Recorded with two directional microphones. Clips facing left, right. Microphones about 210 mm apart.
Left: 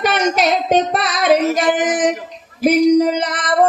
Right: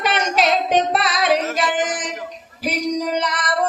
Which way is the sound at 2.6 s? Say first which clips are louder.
Left 11 dB; 50° left (ahead or behind).